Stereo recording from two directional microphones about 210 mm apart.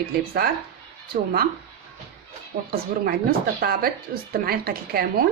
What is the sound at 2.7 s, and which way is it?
A woman's voice, 45° right (ahead or behind).